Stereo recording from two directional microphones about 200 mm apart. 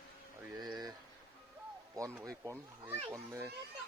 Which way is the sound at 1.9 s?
15° right (ahead or behind).